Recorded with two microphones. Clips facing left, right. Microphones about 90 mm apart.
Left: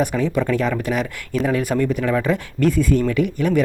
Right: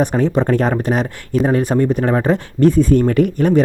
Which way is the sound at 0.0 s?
35° right (ahead or behind).